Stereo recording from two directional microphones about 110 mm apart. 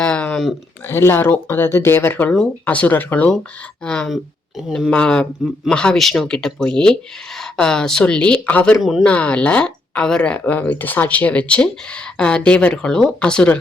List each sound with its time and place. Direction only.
0.0 s a sound: 10° left (ahead or behind)
0.9 s speech: 20° left (ahead or behind)
8.8 s speech: centre (ahead or behind)
9.0 s speech: 10° left (ahead or behind)